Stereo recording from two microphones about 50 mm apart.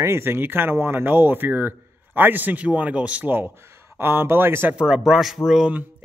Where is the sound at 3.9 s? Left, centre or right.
Right.